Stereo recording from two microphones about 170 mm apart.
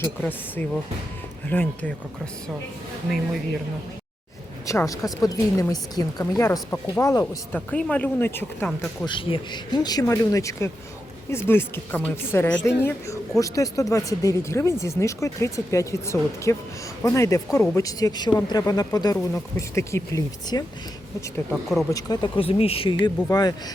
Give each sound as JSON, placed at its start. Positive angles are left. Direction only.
{"t": 0.0, "sound": "speech", "side_deg": 10}
{"t": 4.6, "sound": "speech", "side_deg": 20}
{"t": 7.7, "sound": "speech", "side_deg": 5}
{"t": 9.0, "sound": "speech", "side_deg": 30}
{"t": 21.5, "sound": "speech", "side_deg": 0}
{"t": 21.9, "sound": "speech", "side_deg": 25}